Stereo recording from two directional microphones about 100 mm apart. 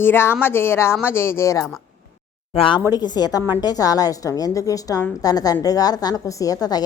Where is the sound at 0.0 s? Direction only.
25° left (ahead or behind).